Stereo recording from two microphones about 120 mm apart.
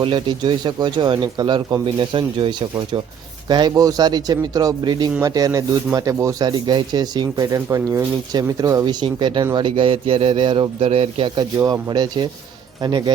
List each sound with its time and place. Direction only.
0.0 s a man's voice: 45° right (ahead or behind)
11.5 s speech: 35° right (ahead or behind)